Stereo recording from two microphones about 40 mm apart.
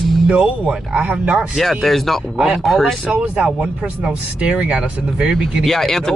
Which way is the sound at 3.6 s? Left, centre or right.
Right.